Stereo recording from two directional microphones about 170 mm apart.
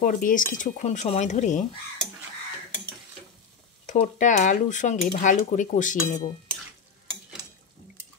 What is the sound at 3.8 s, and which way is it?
Speech, 45° left (ahead or behind).